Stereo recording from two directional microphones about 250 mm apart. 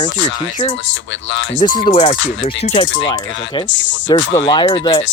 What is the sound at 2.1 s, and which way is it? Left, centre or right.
Speech, left.